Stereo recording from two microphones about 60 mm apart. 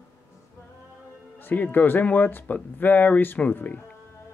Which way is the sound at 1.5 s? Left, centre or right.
Left.